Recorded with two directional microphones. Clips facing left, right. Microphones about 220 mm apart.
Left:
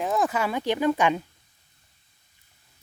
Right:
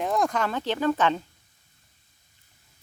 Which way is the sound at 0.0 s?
5° left (ahead or behind).